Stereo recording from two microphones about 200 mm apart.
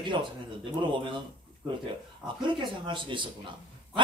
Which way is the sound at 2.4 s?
25° right (ahead or behind).